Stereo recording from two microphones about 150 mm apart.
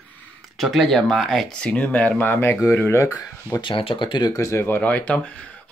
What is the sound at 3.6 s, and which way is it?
Speech, 35° left (ahead or behind).